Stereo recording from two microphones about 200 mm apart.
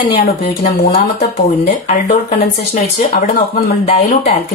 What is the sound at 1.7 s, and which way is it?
Speech, 35° left (ahead or behind).